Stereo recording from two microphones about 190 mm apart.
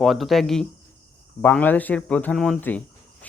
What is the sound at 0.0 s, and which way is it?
Speech, centre (ahead or behind).